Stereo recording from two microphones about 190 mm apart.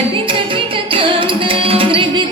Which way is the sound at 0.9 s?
25° right (ahead or behind).